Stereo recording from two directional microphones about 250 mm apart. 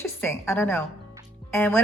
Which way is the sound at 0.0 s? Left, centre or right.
Centre.